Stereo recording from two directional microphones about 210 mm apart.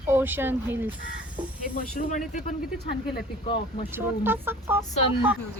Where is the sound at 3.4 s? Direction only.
25° left (ahead or behind).